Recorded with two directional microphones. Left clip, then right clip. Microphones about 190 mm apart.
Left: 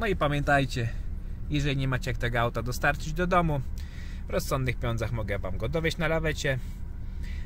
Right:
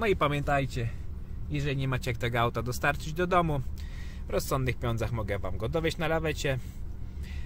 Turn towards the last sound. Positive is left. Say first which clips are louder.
# left 1 dB
turn(degrees=5)  # may be behind; listen again after turning